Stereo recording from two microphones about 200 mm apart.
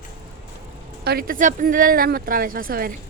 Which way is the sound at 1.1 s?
45° right (ahead or behind).